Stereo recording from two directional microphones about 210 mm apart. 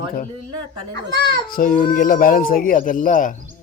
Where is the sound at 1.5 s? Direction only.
40° left (ahead or behind).